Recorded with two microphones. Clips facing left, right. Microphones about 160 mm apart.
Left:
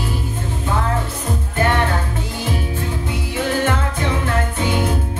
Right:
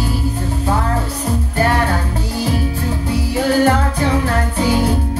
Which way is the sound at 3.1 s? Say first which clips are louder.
Right 6 dB; 35° right (ahead or behind).